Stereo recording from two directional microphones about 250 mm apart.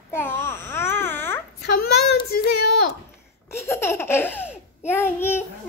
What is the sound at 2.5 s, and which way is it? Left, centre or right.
Speech, left.